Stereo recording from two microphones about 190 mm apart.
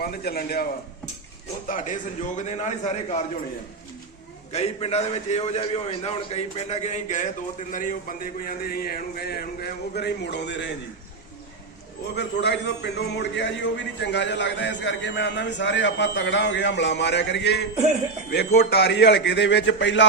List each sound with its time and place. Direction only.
0.0 s a man's voice: 55° left (ahead or behind)
1.6 s a man's voice: 45° left (ahead or behind)
4.5 s a man's voice: 35° left (ahead or behind); by 10.7 s 65° left (ahead or behind)
12.1 s a man's voice: 65° left (ahead or behind)